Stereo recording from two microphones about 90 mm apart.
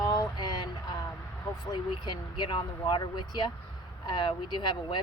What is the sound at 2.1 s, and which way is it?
Speech, 60° left (ahead or behind).